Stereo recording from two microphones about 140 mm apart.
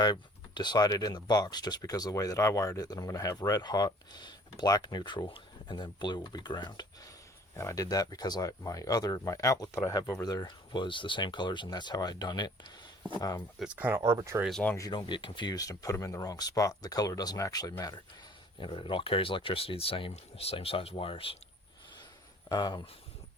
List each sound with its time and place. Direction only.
0.0 s speech: 30° left (ahead or behind)
13.6 s speech: 10° right (ahead or behind)
14.0 s speech: 25° right (ahead or behind)
14.8 s speech: 30° left (ahead or behind)
18.6 s speech: 40° left (ahead or behind)
22.4 s speech: 30° left (ahead or behind)